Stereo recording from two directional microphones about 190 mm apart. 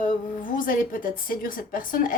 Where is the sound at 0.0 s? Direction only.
45° left (ahead or behind).